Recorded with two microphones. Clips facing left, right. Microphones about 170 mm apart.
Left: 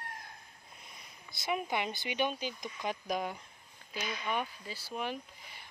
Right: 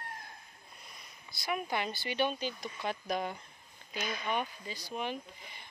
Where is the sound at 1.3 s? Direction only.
20° left (ahead or behind).